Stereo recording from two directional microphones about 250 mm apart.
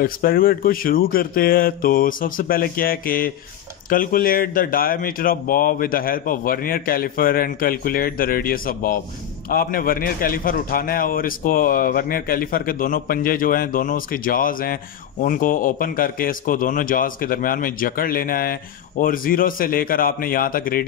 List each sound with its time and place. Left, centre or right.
0.0 s a man's voice: left